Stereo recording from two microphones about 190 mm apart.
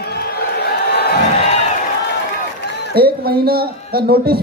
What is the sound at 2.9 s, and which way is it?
A man's voice, 55° right (ahead or behind).